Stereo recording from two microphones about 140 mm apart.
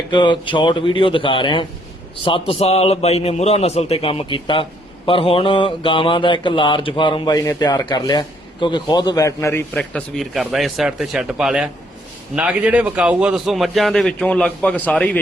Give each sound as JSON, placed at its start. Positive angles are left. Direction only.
{"t": 0.1, "sound": "mantra", "side_deg": 35}
{"t": 2.2, "sound": "a man's voice", "side_deg": 40}
{"t": 5.0, "sound": "mantra", "side_deg": 40}
{"t": 8.6, "sound": "a man's voice", "side_deg": 30}